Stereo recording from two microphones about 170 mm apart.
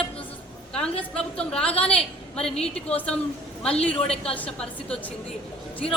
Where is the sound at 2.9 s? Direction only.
5° left (ahead or behind).